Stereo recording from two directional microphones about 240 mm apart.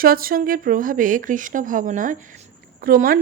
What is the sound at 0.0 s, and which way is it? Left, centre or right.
A woman's voice, right.